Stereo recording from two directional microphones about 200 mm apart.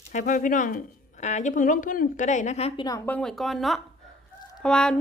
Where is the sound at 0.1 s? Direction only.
40° left (ahead or behind); by 3.0 s 20° left (ahead or behind).